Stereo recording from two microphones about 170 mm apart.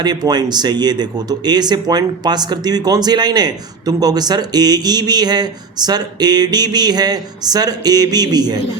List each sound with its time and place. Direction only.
0.0 s speech: 25° right (ahead or behind)